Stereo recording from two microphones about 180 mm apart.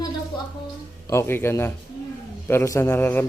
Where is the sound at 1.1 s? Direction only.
15° left (ahead or behind).